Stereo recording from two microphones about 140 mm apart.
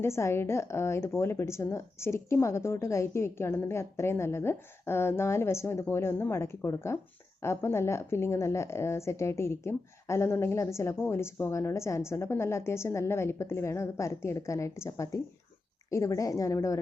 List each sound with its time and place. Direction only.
0.0 s speech: 20° left (ahead or behind)